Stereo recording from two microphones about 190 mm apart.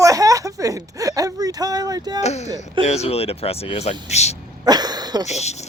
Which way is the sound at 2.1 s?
35° left (ahead or behind).